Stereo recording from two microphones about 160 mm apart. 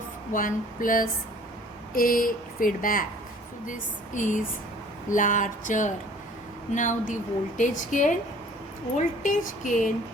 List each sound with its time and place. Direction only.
0.3 s speech: 60° left (ahead or behind)